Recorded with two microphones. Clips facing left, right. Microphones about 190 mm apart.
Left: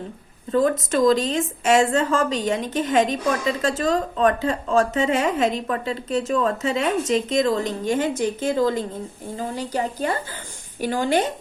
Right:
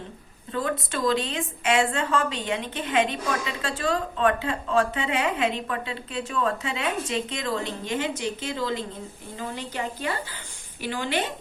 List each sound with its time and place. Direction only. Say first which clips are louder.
0.5 s a woman's voice: left 9 dB; 40° left (ahead or behind)